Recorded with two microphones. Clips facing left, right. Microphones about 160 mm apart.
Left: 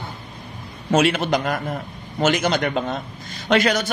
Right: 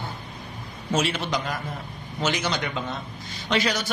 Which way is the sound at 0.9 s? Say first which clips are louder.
Left 7 dB; 60° left (ahead or behind).